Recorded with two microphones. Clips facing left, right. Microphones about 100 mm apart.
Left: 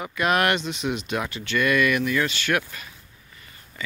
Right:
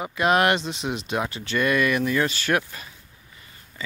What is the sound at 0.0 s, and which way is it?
Speech, 25° right (ahead or behind).